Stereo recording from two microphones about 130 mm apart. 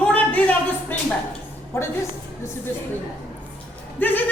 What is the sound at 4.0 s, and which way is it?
Speech, 15° left (ahead or behind).